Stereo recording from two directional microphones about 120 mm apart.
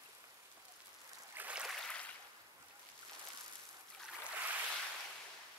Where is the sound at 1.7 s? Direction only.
5° left (ahead or behind).